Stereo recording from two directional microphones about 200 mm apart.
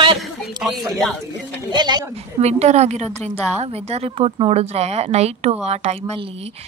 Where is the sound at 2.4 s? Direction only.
35° right (ahead or behind).